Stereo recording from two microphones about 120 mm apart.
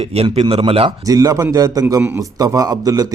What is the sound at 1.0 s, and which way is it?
A man's voice, 30° right (ahead or behind).